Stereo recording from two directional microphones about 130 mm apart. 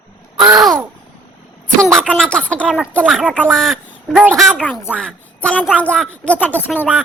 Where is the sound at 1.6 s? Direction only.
5° left (ahead or behind).